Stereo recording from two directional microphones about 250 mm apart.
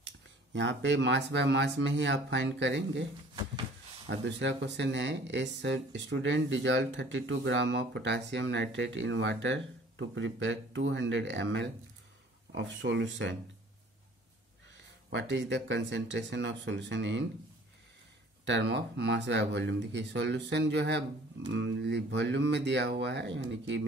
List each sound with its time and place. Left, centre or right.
0.0 s speech: right
4.1 s speech: right
15.0 s speech: right
18.4 s speech: right